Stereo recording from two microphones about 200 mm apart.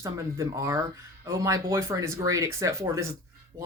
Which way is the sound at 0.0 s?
15° right (ahead or behind).